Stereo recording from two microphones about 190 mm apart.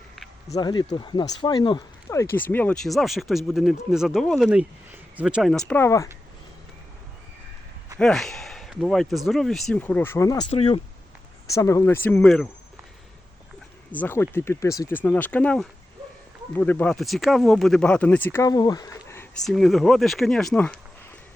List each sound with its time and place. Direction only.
0.5 s speech: 25° left (ahead or behind)
2.0 s speech: 10° left (ahead or behind)
7.9 s speech: centre (ahead or behind)
10.5 s speech: 30° left (ahead or behind)
11.5 s speech: 15° left (ahead or behind)
13.9 s speech: 10° left (ahead or behind)
19.5 s speech: centre (ahead or behind)